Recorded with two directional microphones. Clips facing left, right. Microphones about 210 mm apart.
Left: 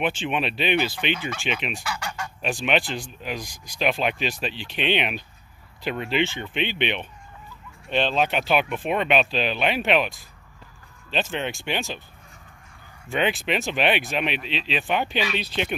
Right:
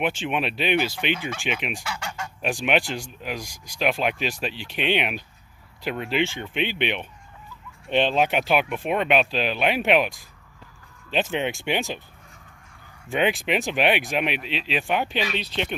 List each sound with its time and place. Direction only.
0.0 s speech: 10° right (ahead or behind)
1.9 s goose: 25° right (ahead or behind)
2.4 s speech: 10° right (ahead or behind)
13.1 s speech: 10° right (ahead or behind)
15.3 s speech: 5° left (ahead or behind)